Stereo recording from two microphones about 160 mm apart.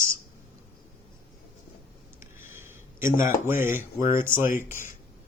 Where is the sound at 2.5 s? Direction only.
15° right (ahead or behind).